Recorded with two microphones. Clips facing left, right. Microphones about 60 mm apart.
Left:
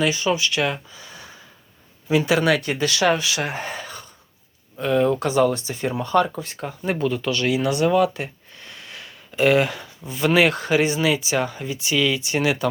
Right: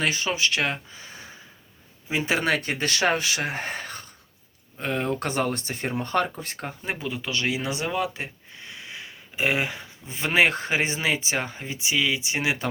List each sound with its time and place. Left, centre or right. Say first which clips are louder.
0.0 s speech: left 4 dB; right
7.0 s speech: left 9 dB; centre
7.3 s speech: left 4 dB; right
7.9 s a sound: left 9 dB; right
10.1 s speech: left 4 dB; right
11.9 s speech: left 3 dB; centre